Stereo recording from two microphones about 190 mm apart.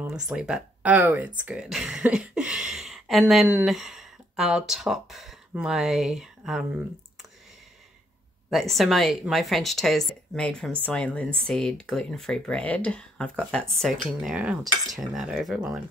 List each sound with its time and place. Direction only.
0.1 s speech: 5° right (ahead or behind)
8.5 s speech: centre (ahead or behind)